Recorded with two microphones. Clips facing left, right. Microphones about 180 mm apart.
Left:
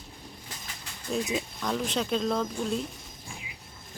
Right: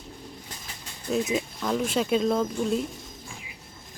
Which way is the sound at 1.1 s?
Centre (ahead or behind).